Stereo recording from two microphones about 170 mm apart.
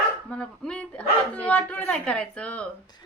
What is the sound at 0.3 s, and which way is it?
Speech, 5° left (ahead or behind).